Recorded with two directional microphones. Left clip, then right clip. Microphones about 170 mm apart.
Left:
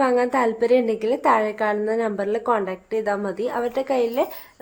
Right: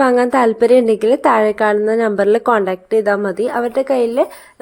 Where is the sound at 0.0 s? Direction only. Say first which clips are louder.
Right 7 dB; 40° right (ahead or behind).